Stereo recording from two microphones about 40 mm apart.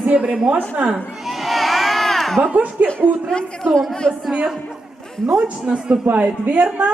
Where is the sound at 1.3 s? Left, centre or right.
Centre.